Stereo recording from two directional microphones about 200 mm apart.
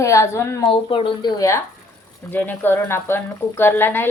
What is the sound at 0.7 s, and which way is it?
A woman's voice, 25° left (ahead or behind).